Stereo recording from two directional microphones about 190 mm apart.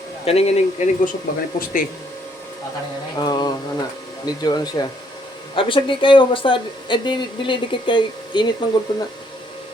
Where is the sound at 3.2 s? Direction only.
20° left (ahead or behind).